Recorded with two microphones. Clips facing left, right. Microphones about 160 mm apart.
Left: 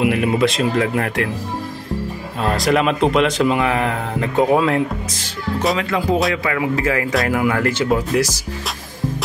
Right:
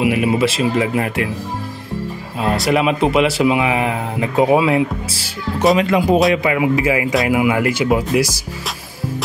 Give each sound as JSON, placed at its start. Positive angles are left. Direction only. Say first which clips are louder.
{"t": 0.0, "sound": "speech", "louder": "right 1 dB", "side_deg": -5}
{"t": 2.4, "sound": "speech", "louder": "right 1 dB", "side_deg": -5}
{"t": 5.8, "sound": "speech", "louder": "right 5 dB", "side_deg": -20}